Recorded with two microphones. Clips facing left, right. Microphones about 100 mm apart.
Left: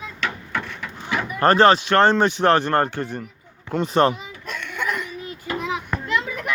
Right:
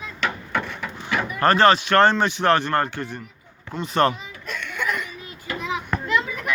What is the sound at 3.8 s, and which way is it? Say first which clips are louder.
Speech: left 2 dB; 30° left (ahead or behind).